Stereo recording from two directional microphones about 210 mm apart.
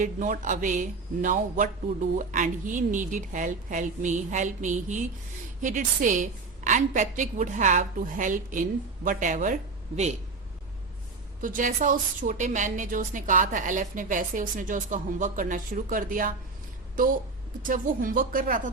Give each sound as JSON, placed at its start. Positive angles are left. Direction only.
{"t": 0.0, "sound": "a woman's voice", "side_deg": -40}
{"t": 11.3, "sound": "speech", "side_deg": -40}
{"t": 17.7, "sound": "speech", "side_deg": -40}